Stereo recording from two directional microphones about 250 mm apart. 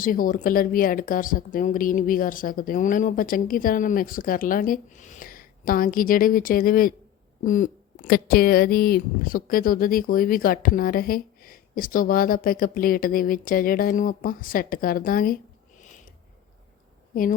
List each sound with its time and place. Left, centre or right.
0.0 s speech: left